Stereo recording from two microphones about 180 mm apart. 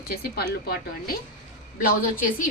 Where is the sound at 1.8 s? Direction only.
50° left (ahead or behind).